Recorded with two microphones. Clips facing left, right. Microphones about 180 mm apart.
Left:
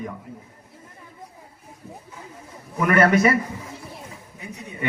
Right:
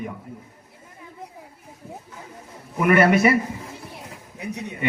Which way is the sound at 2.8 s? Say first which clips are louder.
Right 1 dB; 15° right (ahead or behind).